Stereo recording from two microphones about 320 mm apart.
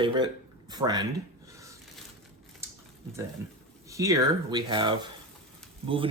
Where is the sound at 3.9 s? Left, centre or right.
Centre.